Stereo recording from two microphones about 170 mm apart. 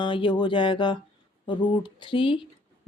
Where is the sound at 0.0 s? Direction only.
30° left (ahead or behind).